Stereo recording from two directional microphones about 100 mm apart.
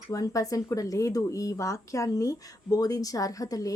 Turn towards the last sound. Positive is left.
turn(degrees=35)  # may be behind; listen again after turning